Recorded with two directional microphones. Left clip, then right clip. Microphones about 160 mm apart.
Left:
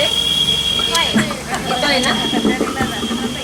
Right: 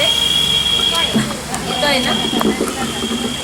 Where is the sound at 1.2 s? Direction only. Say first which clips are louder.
Left 2 dB; 35° left (ahead or behind).